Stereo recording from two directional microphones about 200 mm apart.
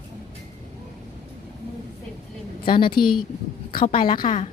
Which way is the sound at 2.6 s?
25° left (ahead or behind).